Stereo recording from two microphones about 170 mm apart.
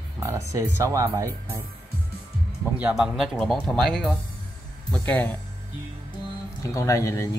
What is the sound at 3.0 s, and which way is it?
Speech, centre (ahead or behind).